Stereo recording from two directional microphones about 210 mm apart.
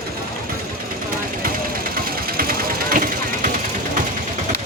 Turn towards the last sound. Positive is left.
turn(degrees=-40)  # may be behind; listen again after turning